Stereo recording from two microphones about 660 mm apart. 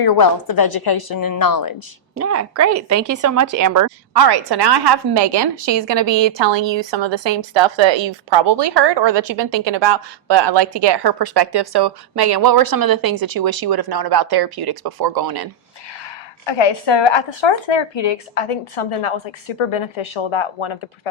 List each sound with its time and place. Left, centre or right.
0.0 s a woman's voice: left
2.1 s speech: right
16.5 s speech: left